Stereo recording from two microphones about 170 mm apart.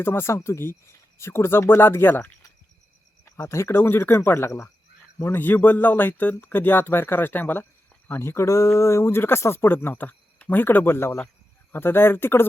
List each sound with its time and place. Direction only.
0.0 s speech: 15° left (ahead or behind)